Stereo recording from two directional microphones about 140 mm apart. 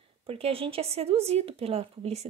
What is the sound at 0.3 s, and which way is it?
A woman's voice, 40° right (ahead or behind).